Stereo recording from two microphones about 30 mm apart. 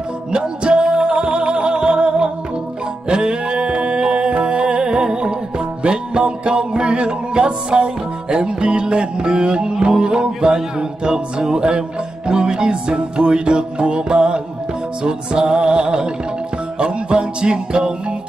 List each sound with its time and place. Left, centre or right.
0.4 s music: right